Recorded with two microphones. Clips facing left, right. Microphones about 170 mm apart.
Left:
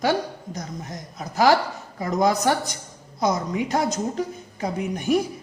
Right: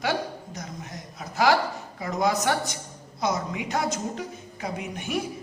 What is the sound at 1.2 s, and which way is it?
Speech, 40° left (ahead or behind).